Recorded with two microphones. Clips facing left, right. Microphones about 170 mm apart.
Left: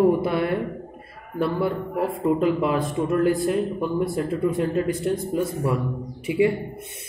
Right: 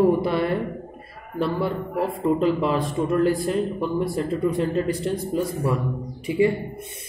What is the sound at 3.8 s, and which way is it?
A man's voice, 10° left (ahead or behind).